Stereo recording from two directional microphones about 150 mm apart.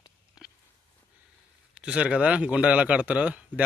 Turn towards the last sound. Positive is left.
turn(degrees=-10)  # may be behind; listen again after turning